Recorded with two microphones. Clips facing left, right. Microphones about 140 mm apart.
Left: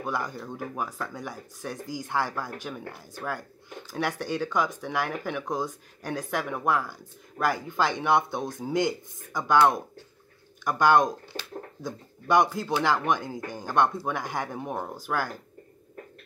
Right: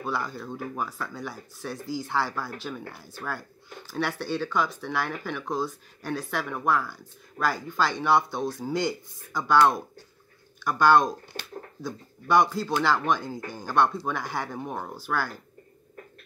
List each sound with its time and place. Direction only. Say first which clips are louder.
0.0 s speech: even; 15° left (ahead or behind)
10.6 s speech: right 1 dB; 20° left (ahead or behind)